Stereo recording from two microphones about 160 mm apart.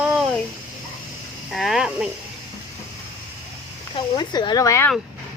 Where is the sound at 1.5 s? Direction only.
Centre (ahead or behind).